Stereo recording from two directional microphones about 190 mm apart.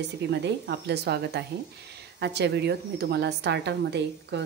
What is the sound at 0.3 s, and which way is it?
A woman's voice, 65° right (ahead or behind).